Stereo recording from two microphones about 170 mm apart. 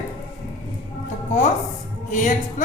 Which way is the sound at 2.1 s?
45° left (ahead or behind).